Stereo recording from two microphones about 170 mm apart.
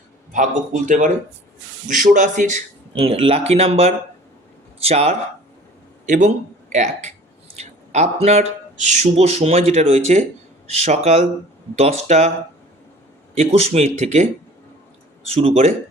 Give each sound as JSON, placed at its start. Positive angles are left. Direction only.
{"t": 0.3, "sound": "speech", "side_deg": -45}
{"t": 2.9, "sound": "speech", "side_deg": -35}
{"t": 13.3, "sound": "speech", "side_deg": -40}
{"t": 15.4, "sound": "speech", "side_deg": -35}